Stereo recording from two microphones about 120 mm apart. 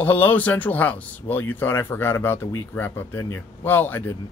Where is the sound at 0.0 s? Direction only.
15° left (ahead or behind).